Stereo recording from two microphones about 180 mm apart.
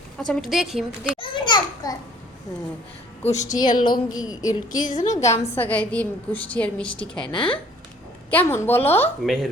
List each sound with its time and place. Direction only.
0.2 s a woman's voice: centre (ahead or behind)
1.2 s a sound: 25° left (ahead or behind)
3.2 s a woman's voice: 40° left (ahead or behind)
3.8 s a woman's voice: 25° left (ahead or behind)
4.8 s a woman's voice: 45° left (ahead or behind)
5.5 s a woman's voice: 10° left (ahead or behind)
7.3 s a woman's voice: 30° left (ahead or behind)
8.4 s a woman's voice: 10° left (ahead or behind)
9.2 s a woman's voice: centre (ahead or behind)